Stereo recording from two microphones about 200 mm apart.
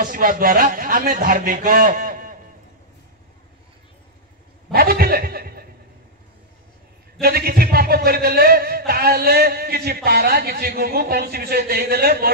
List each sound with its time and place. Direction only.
0.0 s a man's voice: 45° right (ahead or behind)
4.7 s chuckle: 50° right (ahead or behind)
7.2 s a man's voice: 50° right (ahead or behind)